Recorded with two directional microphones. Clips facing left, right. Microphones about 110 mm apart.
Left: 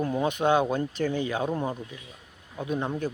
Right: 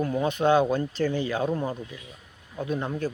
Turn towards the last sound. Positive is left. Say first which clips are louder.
# even
turn(degrees=20)  # may be behind; listen again after turning